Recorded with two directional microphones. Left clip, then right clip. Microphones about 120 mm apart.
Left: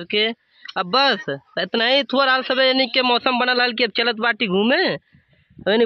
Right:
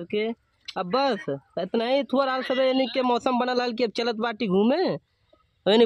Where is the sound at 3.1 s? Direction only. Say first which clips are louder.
Left 6 dB; 20° right (ahead or behind).